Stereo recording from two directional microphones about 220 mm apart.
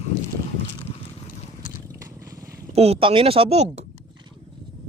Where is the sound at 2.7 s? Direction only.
30° right (ahead or behind).